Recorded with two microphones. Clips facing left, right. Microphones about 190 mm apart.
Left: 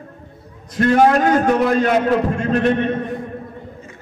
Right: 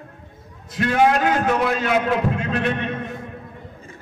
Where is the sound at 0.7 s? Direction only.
45° left (ahead or behind).